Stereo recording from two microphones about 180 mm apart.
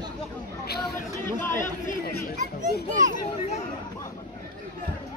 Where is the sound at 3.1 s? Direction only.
40° left (ahead or behind).